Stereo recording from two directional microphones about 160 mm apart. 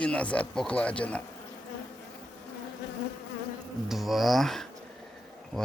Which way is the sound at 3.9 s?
Centre (ahead or behind).